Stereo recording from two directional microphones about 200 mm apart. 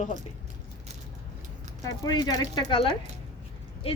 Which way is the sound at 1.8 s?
20° left (ahead or behind).